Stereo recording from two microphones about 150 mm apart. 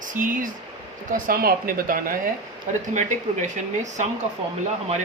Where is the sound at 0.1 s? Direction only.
60° right (ahead or behind).